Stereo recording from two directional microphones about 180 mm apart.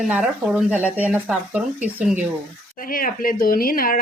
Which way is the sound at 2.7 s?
50° left (ahead or behind).